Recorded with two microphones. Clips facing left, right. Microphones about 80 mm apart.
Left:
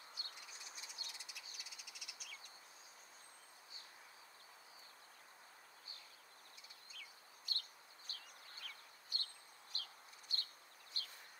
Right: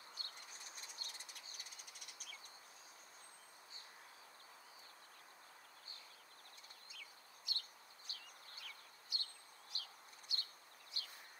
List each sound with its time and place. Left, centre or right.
0.1 s insect: right
6.9 s bird: left
8.1 s a sound: left
10.9 s bird: left